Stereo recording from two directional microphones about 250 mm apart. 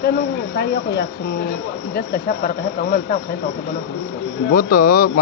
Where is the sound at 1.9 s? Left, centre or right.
Left.